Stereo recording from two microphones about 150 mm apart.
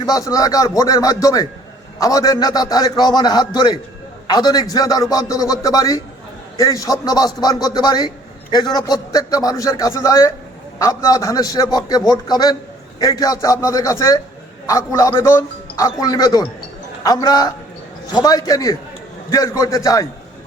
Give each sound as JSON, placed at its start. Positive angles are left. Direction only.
{"t": 0.0, "sound": "a man's voice", "side_deg": 25}